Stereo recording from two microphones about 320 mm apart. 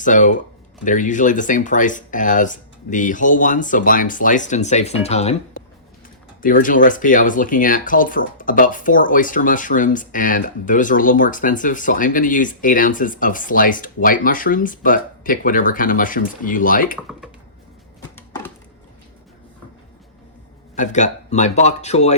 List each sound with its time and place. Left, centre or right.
0.0 s speech: left
20.7 s speech: left